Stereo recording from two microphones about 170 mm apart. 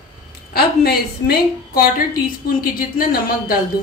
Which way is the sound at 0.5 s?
65° left (ahead or behind).